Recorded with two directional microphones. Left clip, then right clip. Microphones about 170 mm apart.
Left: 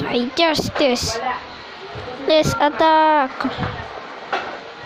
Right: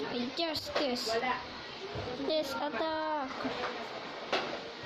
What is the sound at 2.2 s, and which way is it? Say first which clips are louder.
A woman's voice: left 18 dB; 25° left (ahead or behind).